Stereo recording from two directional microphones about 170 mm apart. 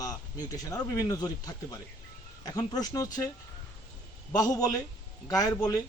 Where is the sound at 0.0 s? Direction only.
20° left (ahead or behind).